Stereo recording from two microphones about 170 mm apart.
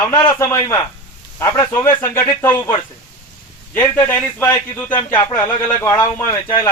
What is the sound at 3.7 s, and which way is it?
A man's voice, 10° left (ahead or behind).